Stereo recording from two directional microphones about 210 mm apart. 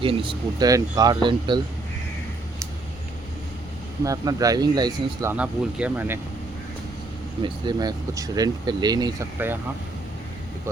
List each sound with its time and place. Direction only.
0.0 s speech: 25° right (ahead or behind)
4.0 s speech: 15° right (ahead or behind)
5.4 s speech: 5° right (ahead or behind)
7.4 s speech: 20° right (ahead or behind)